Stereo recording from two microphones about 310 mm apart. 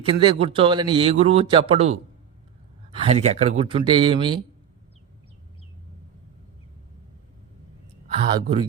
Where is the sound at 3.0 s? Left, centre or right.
Centre.